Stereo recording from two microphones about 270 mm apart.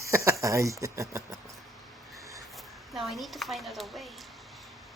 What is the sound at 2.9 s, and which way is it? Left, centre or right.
Speech, centre.